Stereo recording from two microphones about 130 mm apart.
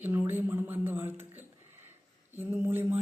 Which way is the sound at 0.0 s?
15° right (ahead or behind).